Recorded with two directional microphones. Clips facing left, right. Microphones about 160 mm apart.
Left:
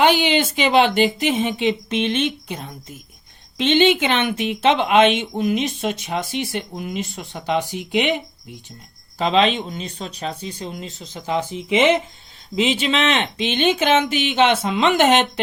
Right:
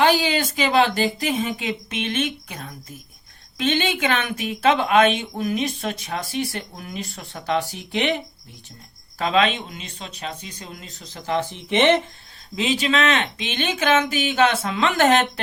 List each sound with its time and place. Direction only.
0.0 s speech: 20° left (ahead or behind)
11.7 s speech: 5° left (ahead or behind)
12.5 s speech: 25° left (ahead or behind)